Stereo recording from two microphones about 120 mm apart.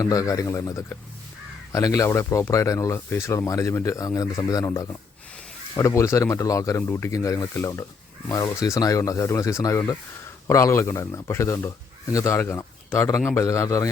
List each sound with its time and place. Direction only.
0.0 s speech: 30° left (ahead or behind)